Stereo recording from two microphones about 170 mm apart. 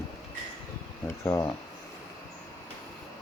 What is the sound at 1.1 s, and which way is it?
Speech, 15° left (ahead or behind).